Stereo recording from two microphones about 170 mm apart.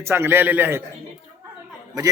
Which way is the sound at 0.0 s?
15° right (ahead or behind).